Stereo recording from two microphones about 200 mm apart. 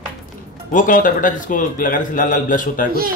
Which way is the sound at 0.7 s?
40° left (ahead or behind).